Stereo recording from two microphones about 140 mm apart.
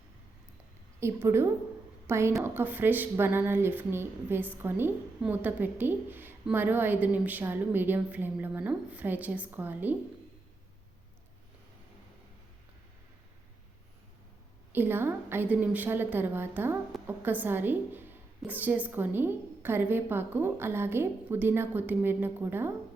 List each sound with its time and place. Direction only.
0.9 s a woman's voice: 20° right (ahead or behind)
14.7 s a woman's voice: 15° right (ahead or behind)